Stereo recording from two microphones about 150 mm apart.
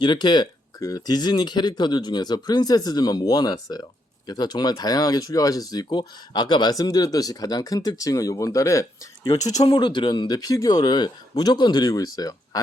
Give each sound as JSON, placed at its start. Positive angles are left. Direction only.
{"t": 0.0, "sound": "speech", "side_deg": 30}